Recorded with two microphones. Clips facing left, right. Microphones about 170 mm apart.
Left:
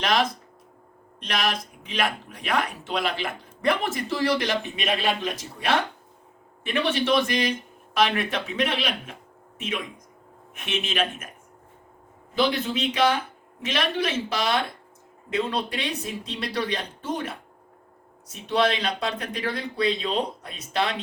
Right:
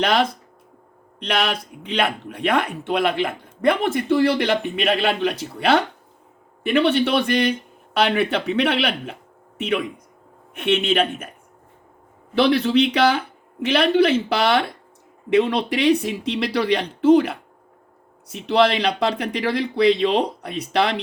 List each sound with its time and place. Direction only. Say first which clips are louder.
0.0 s speech: right 4 dB; 60° right (ahead or behind)
6.8 s speech: even; 60° right (ahead or behind)
12.3 s speech: right 7 dB; 75° right (ahead or behind)